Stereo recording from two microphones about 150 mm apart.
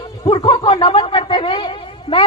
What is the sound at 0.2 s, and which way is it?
Speech, 30° left (ahead or behind).